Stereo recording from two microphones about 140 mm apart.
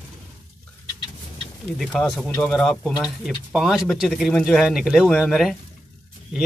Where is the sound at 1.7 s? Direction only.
Centre (ahead or behind).